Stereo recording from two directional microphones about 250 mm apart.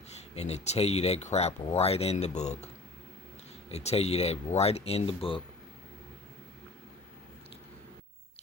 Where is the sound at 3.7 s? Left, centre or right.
Left.